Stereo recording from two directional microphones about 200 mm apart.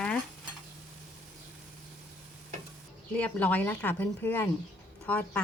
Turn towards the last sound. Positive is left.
turn(degrees=5)  # may be behind; listen again after turning